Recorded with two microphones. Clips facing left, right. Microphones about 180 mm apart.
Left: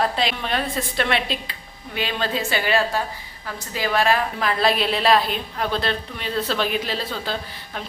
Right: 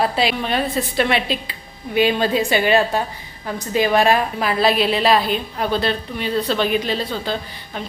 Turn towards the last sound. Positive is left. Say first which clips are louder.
# right 4 dB
turn(degrees=0)  # may be behind; listen again after turning